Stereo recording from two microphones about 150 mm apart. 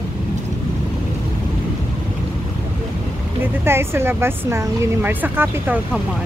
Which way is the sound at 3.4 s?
15° right (ahead or behind).